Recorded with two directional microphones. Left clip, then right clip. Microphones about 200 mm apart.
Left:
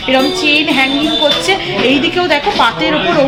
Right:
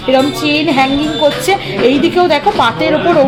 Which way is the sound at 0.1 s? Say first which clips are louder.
Even; 55° right (ahead or behind).